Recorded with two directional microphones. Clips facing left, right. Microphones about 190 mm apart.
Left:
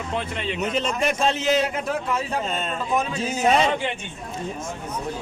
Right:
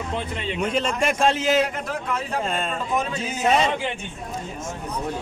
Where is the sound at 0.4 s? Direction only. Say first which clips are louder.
Right 2 dB; centre (ahead or behind).